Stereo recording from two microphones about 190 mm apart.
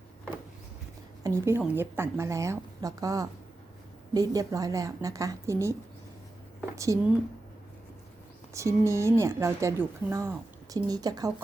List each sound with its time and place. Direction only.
1.2 s a woman's voice: 15° right (ahead or behind)
6.7 s a woman's voice: 15° right (ahead or behind)
8.5 s a woman's voice: 15° right (ahead or behind)